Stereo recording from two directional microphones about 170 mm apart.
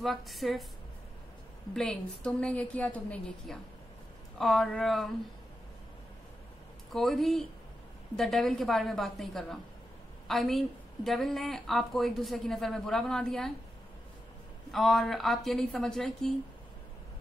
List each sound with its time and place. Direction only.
0.0 s speech: centre (ahead or behind)
1.7 s a woman's voice: 5° left (ahead or behind)
6.9 s a woman's voice: centre (ahead or behind)
14.7 s speech: centre (ahead or behind)